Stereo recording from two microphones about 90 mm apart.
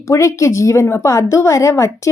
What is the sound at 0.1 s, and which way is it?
Speech, 35° left (ahead or behind).